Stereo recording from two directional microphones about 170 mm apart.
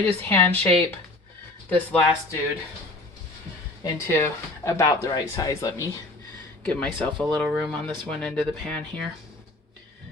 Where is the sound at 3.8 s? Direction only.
15° left (ahead or behind).